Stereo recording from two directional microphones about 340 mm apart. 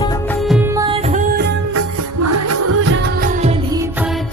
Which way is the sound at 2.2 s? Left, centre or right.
Right.